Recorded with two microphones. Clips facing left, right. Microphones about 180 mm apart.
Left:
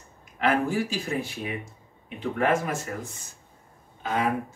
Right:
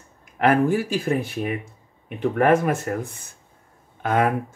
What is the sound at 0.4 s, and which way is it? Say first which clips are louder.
Speech: right 6 dB; 55° right (ahead or behind).